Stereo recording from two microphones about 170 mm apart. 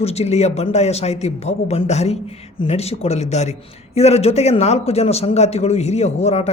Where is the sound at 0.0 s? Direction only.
40° left (ahead or behind).